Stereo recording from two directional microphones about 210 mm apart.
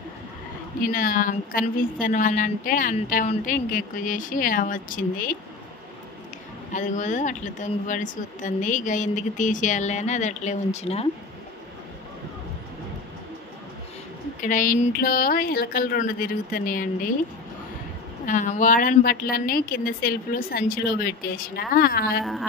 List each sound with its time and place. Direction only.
0.9 s speech: 40° left (ahead or behind)
6.7 s speech: 35° left (ahead or behind)
14.4 s speech: 40° left (ahead or behind)
18.2 s a woman's voice: 35° left (ahead or behind)